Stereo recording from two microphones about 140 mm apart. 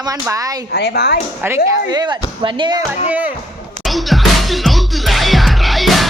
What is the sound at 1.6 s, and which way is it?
Speech, 30° right (ahead or behind).